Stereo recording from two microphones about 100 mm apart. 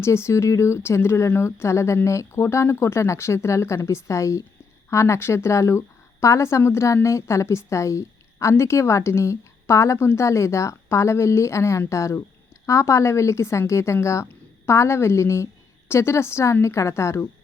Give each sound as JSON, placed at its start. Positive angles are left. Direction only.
{"t": 0.0, "sound": "speech", "side_deg": 25}